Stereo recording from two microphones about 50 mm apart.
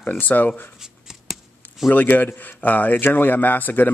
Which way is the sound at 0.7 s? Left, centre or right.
Centre.